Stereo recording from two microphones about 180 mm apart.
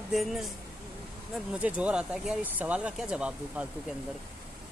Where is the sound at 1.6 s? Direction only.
5° right (ahead or behind).